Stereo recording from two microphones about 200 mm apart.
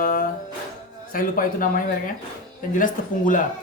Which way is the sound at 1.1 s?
45° left (ahead or behind).